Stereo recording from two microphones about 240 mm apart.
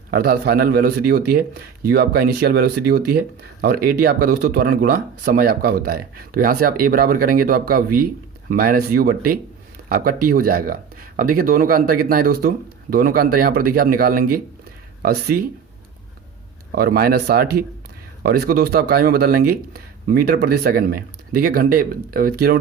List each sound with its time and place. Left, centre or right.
0.1 s speech: right
16.7 s speech: right